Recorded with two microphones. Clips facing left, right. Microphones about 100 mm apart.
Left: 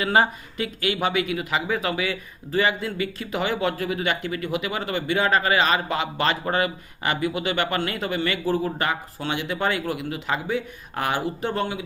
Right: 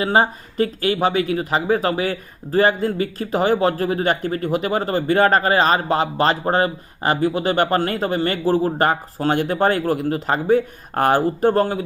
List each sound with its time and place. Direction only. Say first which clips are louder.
0.0 s speech: right 3 dB; 30° right (ahead or behind)